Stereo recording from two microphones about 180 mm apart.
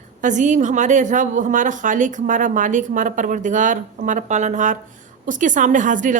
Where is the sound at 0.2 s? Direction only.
45° right (ahead or behind).